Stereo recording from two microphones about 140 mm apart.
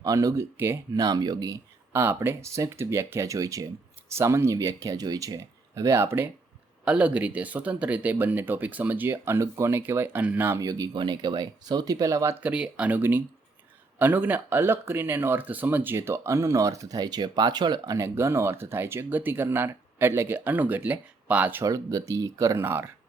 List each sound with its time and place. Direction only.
0.0 s speech: 25° right (ahead or behind)
1.0 s speech: 30° right (ahead or behind)
1.9 s speech: 15° right (ahead or behind)
21.6 s speech: 25° right (ahead or behind)